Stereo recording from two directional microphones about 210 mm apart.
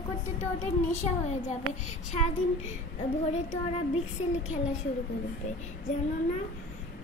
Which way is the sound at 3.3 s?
30° left (ahead or behind).